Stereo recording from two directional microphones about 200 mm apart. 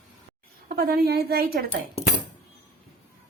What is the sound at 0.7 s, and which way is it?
Speech, 50° right (ahead or behind).